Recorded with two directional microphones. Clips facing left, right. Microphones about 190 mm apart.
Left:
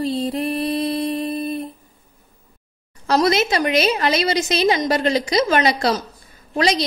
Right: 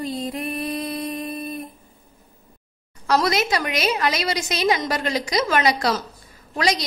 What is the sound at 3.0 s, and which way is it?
A woman's voice, 25° left (ahead or behind).